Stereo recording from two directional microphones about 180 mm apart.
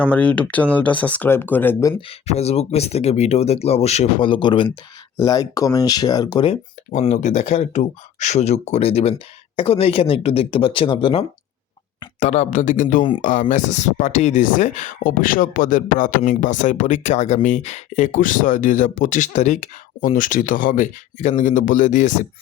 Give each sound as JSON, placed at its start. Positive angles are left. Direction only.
{"t": 0.0, "sound": "speech", "side_deg": 5}
{"t": 2.0, "sound": "speech", "side_deg": 35}
{"t": 7.1, "sound": "speech", "side_deg": 40}